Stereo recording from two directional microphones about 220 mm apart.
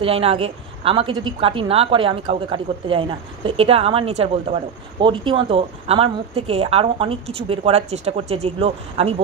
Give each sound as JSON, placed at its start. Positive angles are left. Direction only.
{"t": 0.0, "sound": "a woman's voice", "side_deg": -25}